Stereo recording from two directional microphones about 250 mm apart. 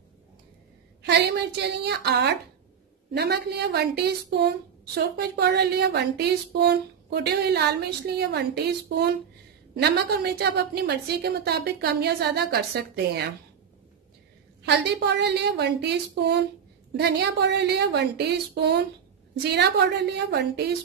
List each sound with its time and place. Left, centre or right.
1.6 s a woman's voice: right
14.7 s a woman's voice: right